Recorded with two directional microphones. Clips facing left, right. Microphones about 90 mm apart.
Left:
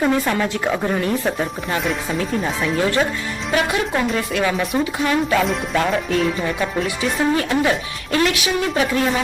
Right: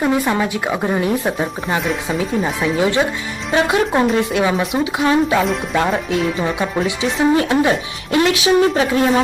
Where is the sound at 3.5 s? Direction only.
30° right (ahead or behind).